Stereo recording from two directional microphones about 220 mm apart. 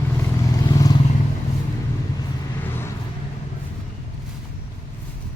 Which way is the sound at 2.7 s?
10° left (ahead or behind).